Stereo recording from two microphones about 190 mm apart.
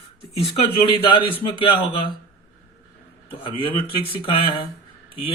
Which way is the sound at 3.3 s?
30° left (ahead or behind).